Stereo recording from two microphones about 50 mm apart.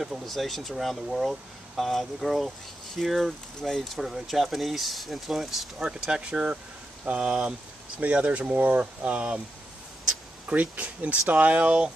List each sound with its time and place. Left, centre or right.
0.0 s speech: centre; by 9.4 s right
10.5 s speech: right